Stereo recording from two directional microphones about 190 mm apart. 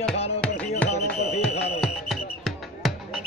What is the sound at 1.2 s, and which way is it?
Music, 60° left (ahead or behind).